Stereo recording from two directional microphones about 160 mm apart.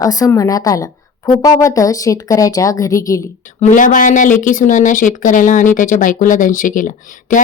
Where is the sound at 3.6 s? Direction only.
50° left (ahead or behind).